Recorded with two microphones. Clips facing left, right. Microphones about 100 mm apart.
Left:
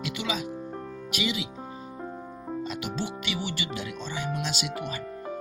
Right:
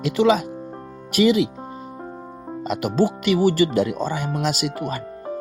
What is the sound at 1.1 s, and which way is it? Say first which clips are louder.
Speech: right 14 dB; 50° right (ahead or behind).